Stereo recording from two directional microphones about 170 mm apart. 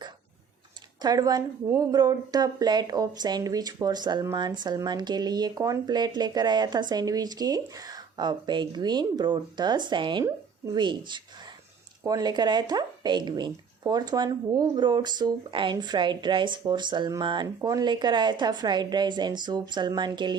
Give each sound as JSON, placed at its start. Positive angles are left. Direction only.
{"t": 1.0, "sound": "speech", "side_deg": -20}